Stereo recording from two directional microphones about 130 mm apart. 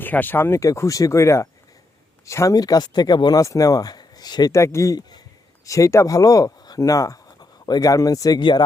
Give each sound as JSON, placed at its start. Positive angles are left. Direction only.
{"t": 0.0, "sound": "speech", "side_deg": 15}